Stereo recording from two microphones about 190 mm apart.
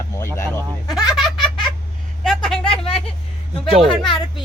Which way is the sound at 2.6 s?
30° left (ahead or behind).